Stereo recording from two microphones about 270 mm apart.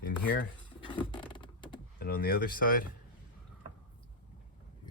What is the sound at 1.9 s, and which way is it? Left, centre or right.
Speech, left.